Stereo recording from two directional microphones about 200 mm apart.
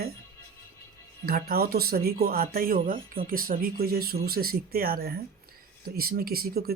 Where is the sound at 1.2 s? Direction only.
50° right (ahead or behind).